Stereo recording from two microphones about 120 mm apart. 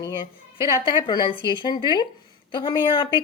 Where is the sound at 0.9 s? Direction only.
40° left (ahead or behind).